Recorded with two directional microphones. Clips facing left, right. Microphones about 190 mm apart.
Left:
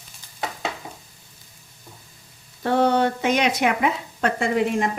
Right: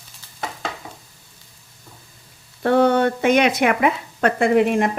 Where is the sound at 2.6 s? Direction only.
55° right (ahead or behind).